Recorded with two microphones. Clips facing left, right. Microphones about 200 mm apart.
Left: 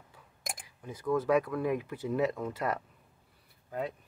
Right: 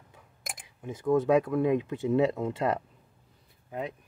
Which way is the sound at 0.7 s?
25° right (ahead or behind).